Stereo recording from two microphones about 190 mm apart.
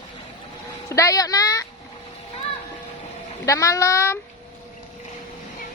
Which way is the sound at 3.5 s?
15° left (ahead or behind).